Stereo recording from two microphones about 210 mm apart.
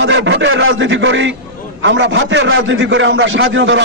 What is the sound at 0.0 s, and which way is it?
A man's voice, 60° right (ahead or behind).